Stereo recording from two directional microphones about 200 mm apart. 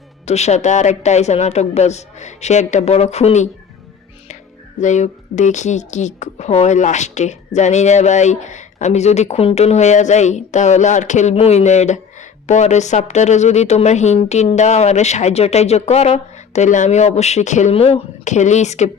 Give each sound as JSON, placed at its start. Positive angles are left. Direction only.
{"t": 0.3, "sound": "a woman's voice", "side_deg": 35}
{"t": 4.8, "sound": "a woman's voice", "side_deg": 35}